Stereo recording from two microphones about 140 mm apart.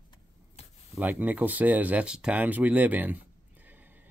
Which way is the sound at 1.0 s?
10° right (ahead or behind).